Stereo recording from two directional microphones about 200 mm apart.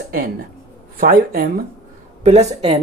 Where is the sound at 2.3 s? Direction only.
35° right (ahead or behind).